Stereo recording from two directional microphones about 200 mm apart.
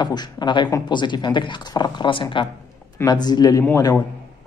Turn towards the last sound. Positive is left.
turn(degrees=10)  # may be behind; listen again after turning